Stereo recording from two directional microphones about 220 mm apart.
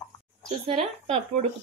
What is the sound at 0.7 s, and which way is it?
Speech, 25° right (ahead or behind).